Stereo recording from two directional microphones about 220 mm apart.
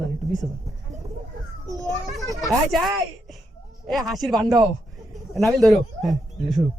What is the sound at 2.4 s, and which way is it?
A woman's voice, centre (ahead or behind).